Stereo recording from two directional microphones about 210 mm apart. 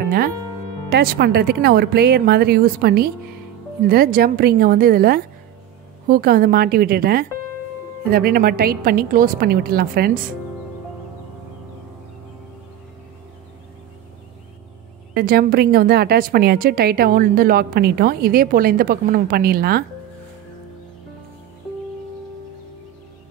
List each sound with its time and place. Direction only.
0.8 s a woman's voice: 50° right (ahead or behind)
15.1 s a woman's voice: 45° right (ahead or behind)